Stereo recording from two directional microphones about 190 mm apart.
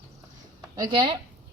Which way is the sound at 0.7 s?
20° right (ahead or behind).